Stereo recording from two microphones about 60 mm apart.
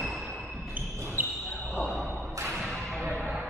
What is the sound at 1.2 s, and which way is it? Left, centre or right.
Basketball bounce, right.